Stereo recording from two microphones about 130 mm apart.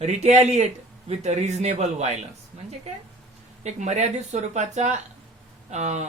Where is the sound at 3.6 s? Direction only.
60° right (ahead or behind).